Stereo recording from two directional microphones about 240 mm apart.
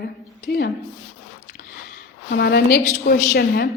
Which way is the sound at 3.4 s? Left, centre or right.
Left.